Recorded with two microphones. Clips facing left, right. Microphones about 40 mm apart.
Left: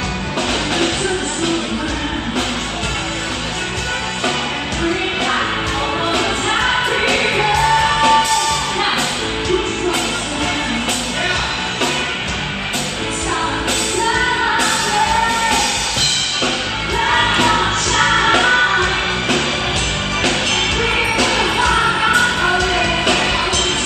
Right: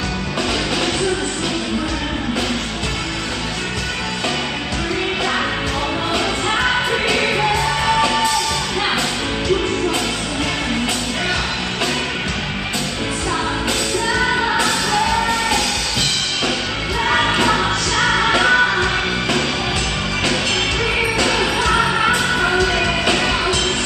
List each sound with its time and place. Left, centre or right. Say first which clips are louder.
7.1 s music: left 1 dB; left
13.9 s music: left 2 dB; left
17.1 s music: left 1 dB; left
20.8 s music: left 1 dB; left